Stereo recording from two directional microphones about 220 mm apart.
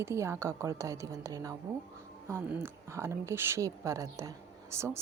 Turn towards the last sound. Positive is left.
turn(degrees=-10)  # may be behind; listen again after turning